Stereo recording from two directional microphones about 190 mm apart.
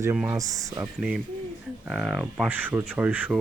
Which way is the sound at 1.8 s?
Centre (ahead or behind).